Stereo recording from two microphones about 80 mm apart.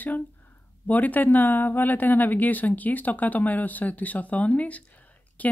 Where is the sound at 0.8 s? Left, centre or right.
Left.